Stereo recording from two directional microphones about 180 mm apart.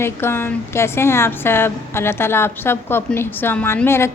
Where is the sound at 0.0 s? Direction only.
15° left (ahead or behind).